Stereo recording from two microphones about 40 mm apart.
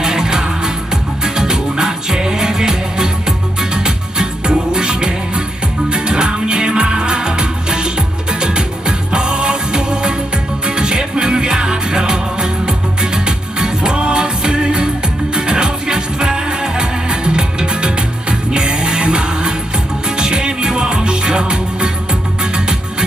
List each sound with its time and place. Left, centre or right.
0.0 s music: centre